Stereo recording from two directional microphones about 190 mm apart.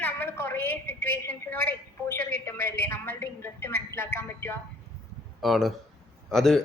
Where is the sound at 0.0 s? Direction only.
10° left (ahead or behind).